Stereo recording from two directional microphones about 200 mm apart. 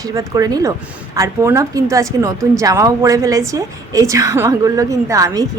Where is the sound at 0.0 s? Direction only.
15° right (ahead or behind).